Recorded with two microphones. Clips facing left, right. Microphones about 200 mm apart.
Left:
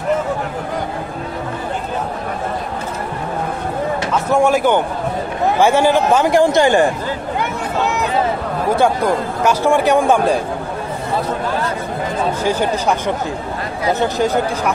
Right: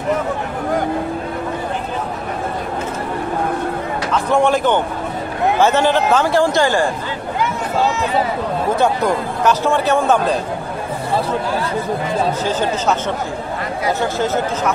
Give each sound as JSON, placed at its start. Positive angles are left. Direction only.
{"t": 4.1, "sound": "a man's voice", "side_deg": 10}
{"t": 8.7, "sound": "a man's voice", "side_deg": 10}
{"t": 12.4, "sound": "a man's voice", "side_deg": 10}
{"t": 13.9, "sound": "a man's voice", "side_deg": 15}